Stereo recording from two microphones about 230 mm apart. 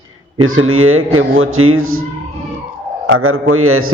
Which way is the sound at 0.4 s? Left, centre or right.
Right.